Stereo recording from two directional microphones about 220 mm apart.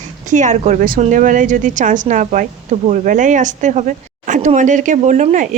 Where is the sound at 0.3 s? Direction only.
35° right (ahead or behind).